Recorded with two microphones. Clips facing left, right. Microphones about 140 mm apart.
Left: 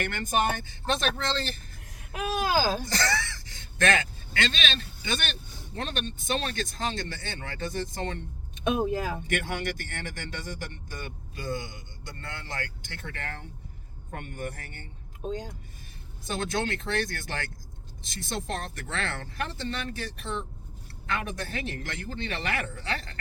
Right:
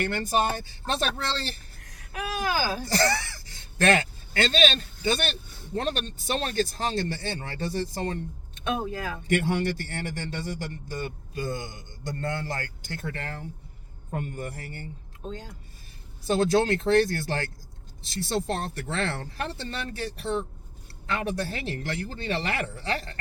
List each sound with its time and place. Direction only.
0.0 s a man's voice: 30° right (ahead or behind)
2.2 s speech: 20° left (ahead or behind)
2.8 s speech: 35° right (ahead or behind)
8.6 s speech: 20° left (ahead or behind)
9.3 s a man's voice: 30° right (ahead or behind)
15.2 s speech: 15° left (ahead or behind)
16.2 s a man's voice: 35° right (ahead or behind)